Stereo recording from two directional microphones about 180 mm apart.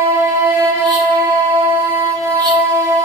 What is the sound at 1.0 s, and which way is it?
Music, 15° right (ahead or behind).